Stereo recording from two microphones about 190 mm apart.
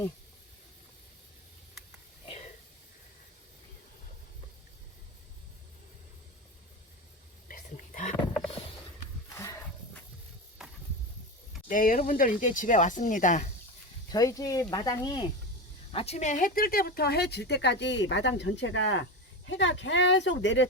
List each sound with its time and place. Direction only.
7.4 s a sound: 45° left (ahead or behind)
9.3 s a sound: 15° left (ahead or behind)
11.7 s speech: 45° left (ahead or behind)
14.1 s speech: 20° left (ahead or behind)
15.9 s speech: 30° left (ahead or behind); by 19.0 s 80° left
19.5 s speech: 70° left (ahead or behind)